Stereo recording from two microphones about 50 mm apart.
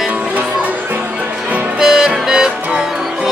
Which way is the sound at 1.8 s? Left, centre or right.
Centre.